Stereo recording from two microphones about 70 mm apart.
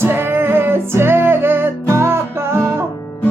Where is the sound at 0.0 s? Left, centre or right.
Right.